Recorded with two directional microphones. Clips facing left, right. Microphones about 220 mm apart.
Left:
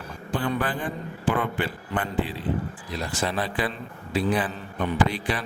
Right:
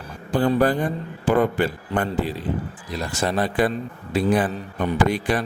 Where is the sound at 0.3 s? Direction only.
40° right (ahead or behind).